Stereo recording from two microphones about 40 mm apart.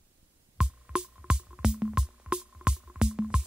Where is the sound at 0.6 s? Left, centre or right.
Right.